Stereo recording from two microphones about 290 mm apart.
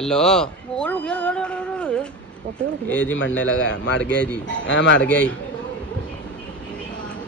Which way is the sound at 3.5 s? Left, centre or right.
Left.